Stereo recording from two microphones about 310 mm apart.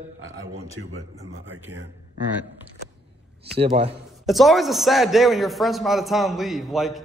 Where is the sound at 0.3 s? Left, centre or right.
Centre.